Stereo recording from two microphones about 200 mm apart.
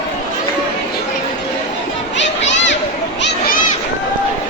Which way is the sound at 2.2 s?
65° left (ahead or behind).